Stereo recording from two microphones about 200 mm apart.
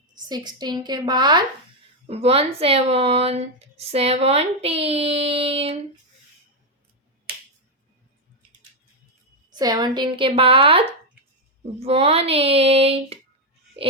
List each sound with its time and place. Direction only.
0.1 s speech: 20° right (ahead or behind)
9.6 s speech: 20° right (ahead or behind)